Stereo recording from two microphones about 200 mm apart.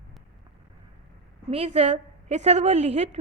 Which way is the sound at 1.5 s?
30° right (ahead or behind).